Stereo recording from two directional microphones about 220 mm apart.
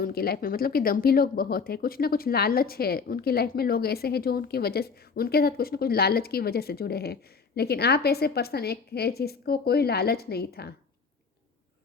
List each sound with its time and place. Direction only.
0.0 s speech: 45° left (ahead or behind)